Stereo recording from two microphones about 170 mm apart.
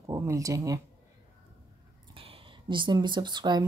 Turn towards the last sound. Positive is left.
turn(degrees=-25)  # may be behind; listen again after turning